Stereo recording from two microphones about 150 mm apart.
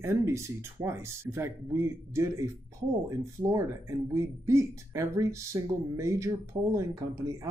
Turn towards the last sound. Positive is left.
turn(degrees=-20)  # may be behind; listen again after turning